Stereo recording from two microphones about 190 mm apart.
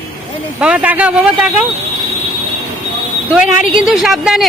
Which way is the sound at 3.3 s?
5° right (ahead or behind).